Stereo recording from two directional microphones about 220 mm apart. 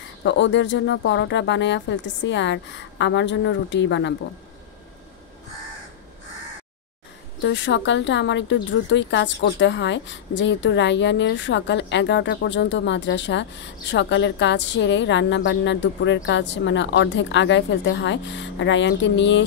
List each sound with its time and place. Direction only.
0.2 s speech: 55° left (ahead or behind)
7.4 s speech: 55° left (ahead or behind)